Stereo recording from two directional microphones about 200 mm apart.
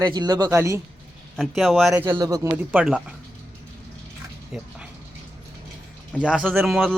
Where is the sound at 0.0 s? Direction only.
20° right (ahead or behind).